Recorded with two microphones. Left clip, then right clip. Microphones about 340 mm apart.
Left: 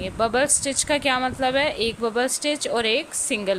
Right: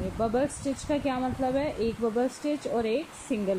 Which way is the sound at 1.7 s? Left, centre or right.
Left.